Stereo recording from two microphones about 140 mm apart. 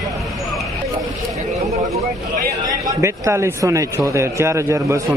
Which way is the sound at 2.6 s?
25° right (ahead or behind).